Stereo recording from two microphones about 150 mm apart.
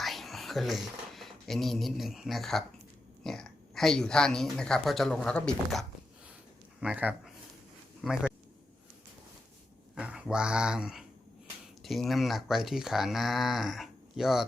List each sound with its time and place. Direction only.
0.0 s speech: centre (ahead or behind)
6.7 s speech: 10° right (ahead or behind)
9.9 s speech: 5° right (ahead or behind)